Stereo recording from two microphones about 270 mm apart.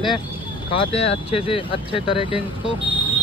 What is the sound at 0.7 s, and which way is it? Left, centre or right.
Speech, centre.